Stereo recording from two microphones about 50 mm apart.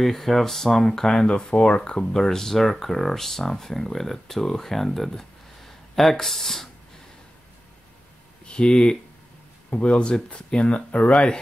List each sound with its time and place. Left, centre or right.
0.0 s speech: centre
8.5 s speech: centre